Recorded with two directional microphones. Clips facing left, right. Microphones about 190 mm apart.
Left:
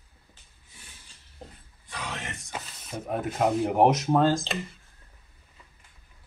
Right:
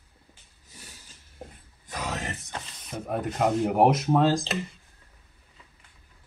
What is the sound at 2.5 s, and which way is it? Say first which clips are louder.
Speech: even; 5° left (ahead or behind).